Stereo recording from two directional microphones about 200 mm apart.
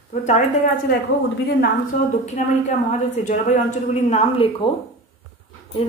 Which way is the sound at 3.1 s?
35° left (ahead or behind).